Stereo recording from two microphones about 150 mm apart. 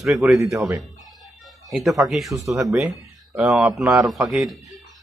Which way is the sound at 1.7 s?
Centre (ahead or behind).